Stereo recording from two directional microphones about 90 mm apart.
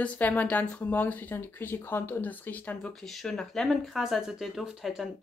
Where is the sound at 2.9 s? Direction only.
5° left (ahead or behind).